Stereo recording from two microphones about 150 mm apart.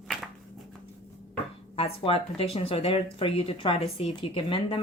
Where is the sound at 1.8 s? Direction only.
40° left (ahead or behind).